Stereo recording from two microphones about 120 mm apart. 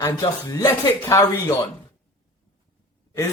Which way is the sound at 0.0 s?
30° left (ahead or behind).